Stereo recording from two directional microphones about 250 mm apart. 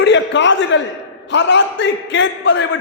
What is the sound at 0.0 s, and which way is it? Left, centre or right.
A man's voice, left.